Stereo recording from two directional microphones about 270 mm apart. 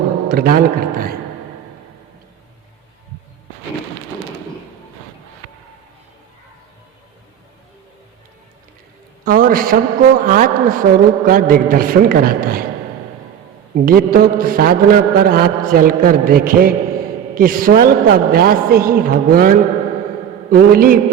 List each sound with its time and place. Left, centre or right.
0.3 s a man's voice: right
9.2 s a man's voice: right
13.7 s a man's voice: right